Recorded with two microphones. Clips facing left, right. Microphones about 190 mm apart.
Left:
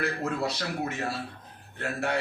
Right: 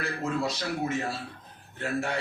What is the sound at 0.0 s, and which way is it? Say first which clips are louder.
Speech: left 1 dB; 65° left (ahead or behind).